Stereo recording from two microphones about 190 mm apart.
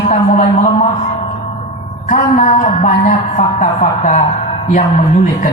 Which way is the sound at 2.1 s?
35° left (ahead or behind).